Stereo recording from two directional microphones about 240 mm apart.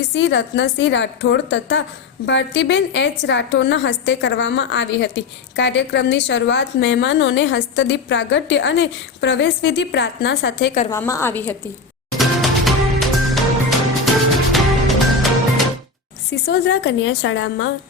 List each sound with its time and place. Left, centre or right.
0.1 s a woman's voice: left
10.9 s a woman's voice: centre
12.1 s music: centre
16.5 s a woman's voice: left